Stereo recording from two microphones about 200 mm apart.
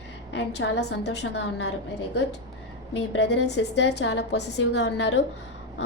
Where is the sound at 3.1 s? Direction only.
60° left (ahead or behind).